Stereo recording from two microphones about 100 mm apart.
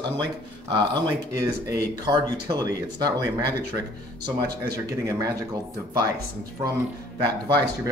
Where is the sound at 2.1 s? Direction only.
45° right (ahead or behind).